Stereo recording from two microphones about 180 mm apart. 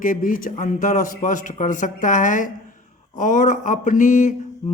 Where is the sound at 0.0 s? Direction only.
50° left (ahead or behind).